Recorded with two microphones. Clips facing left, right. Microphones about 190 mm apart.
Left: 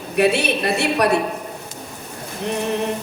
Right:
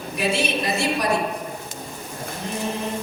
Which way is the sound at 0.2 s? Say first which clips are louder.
Left 6 dB; 65° left (ahead or behind).